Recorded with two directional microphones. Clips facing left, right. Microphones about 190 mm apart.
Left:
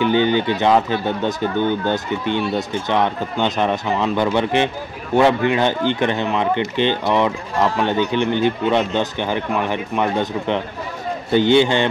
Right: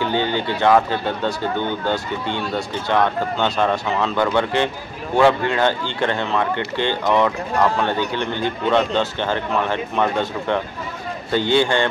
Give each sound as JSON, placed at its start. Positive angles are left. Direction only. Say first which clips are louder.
{"t": 0.0, "sound": "speech", "louder": "left 5 dB", "side_deg": 15}